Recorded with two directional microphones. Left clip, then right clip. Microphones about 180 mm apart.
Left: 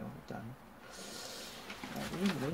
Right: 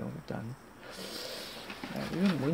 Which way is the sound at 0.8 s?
50° right (ahead or behind).